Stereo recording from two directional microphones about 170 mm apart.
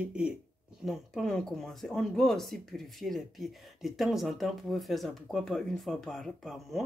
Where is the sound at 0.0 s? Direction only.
5° right (ahead or behind).